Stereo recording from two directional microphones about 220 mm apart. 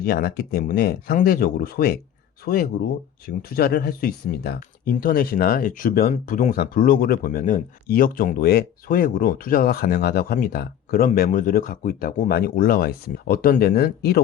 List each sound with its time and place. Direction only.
0.0 s speech: 45° left (ahead or behind)